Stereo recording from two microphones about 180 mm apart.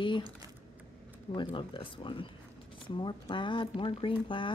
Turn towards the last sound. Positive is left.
turn(degrees=25)  # may be behind; listen again after turning